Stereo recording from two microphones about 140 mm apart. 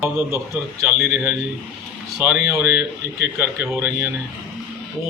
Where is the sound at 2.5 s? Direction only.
15° right (ahead or behind).